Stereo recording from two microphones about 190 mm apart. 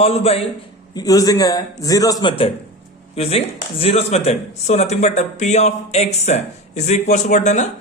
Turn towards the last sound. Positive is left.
turn(degrees=40)  # may be behind; listen again after turning